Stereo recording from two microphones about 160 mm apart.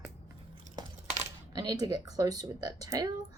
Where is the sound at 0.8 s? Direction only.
25° right (ahead or behind).